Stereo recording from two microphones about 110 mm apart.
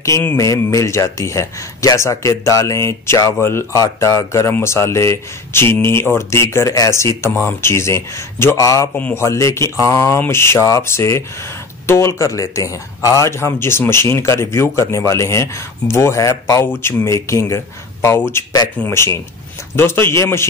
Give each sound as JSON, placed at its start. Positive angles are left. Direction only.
{"t": 0.0, "sound": "speech", "side_deg": 25}
{"t": 8.9, "sound": "speech", "side_deg": 15}
{"t": 9.2, "sound": "speech", "side_deg": 25}